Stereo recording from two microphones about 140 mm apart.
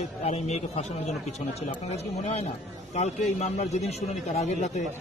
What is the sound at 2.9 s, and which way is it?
A man's voice, 50° left (ahead or behind).